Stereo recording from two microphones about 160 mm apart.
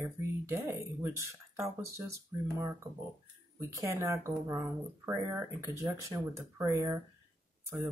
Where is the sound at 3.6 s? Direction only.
20° right (ahead or behind).